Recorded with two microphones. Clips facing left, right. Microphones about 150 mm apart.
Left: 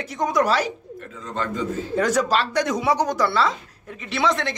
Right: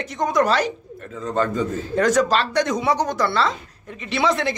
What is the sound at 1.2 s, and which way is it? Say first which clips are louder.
Speech: right 6 dB; 45° right (ahead or behind).